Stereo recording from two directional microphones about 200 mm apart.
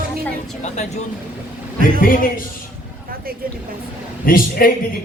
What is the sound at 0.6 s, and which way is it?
Speech, 35° left (ahead or behind).